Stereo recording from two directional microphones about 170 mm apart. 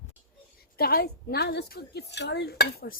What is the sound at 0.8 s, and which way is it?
Speech, 65° left (ahead or behind).